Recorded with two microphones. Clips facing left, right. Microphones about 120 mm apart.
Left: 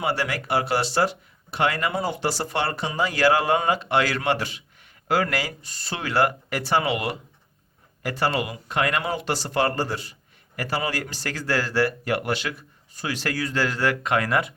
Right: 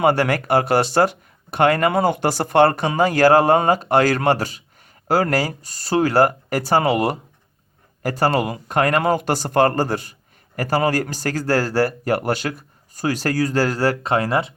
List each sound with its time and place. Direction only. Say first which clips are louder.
0.0 s a man's voice: right 9 dB; 50° right (ahead or behind); by 14.5 s 30° right (ahead or behind)